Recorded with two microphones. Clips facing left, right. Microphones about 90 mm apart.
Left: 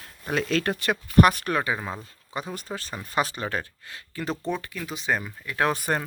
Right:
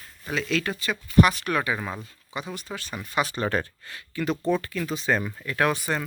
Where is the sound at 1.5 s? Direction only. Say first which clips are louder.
Even; 30° left (ahead or behind).